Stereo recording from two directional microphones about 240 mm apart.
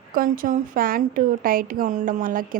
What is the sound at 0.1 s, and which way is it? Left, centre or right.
A woman's voice, right.